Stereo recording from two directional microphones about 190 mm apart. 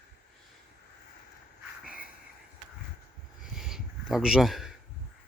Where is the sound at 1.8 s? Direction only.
50° left (ahead or behind).